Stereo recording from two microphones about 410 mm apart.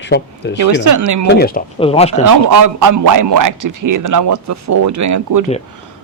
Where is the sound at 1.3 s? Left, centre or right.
Left.